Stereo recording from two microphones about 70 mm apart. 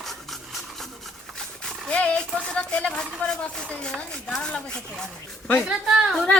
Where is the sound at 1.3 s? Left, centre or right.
Centre.